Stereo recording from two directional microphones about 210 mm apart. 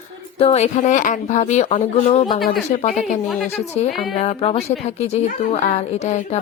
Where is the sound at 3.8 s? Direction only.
35° left (ahead or behind).